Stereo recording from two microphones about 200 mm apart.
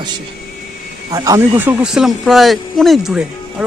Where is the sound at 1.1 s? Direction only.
15° right (ahead or behind).